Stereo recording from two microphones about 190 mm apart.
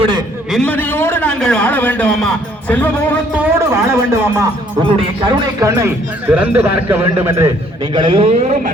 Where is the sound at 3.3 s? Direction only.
10° right (ahead or behind).